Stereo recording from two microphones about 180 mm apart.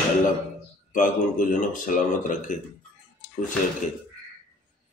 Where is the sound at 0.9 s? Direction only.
45° left (ahead or behind).